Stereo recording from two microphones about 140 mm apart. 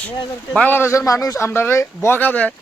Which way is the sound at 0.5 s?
10° left (ahead or behind).